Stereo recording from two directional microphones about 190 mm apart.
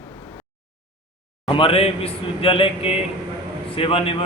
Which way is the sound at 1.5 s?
30° left (ahead or behind).